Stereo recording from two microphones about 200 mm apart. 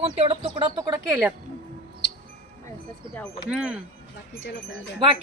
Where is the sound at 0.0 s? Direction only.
30° right (ahead or behind).